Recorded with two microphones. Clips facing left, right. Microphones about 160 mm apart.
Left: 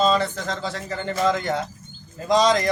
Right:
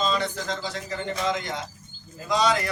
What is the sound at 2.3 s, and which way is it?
Speech, 35° left (ahead or behind).